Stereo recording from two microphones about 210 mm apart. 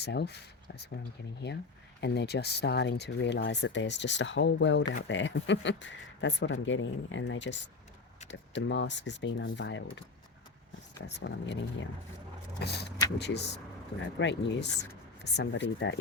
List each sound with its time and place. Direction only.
0.0 s speech: 50° left (ahead or behind)
2.0 s speech: 50° left (ahead or behind)
12.5 s speech: 50° left (ahead or behind)